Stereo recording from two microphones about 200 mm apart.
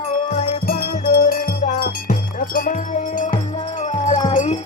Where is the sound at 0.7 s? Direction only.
50° left (ahead or behind).